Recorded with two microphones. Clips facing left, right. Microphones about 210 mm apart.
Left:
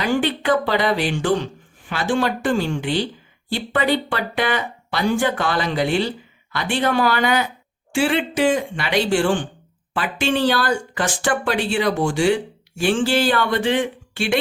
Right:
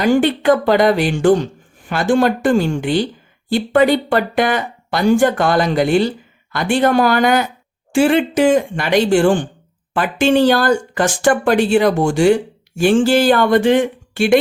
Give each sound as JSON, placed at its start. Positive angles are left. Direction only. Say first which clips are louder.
{"t": 0.0, "sound": "speech", "louder": "right 7 dB", "side_deg": -45}